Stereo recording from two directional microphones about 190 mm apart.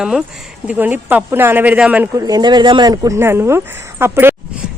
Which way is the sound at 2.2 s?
20° right (ahead or behind).